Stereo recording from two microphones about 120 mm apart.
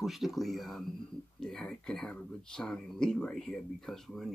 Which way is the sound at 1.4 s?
5° left (ahead or behind).